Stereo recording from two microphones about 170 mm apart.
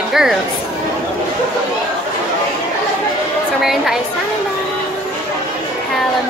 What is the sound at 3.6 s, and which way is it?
Speech, centre (ahead or behind).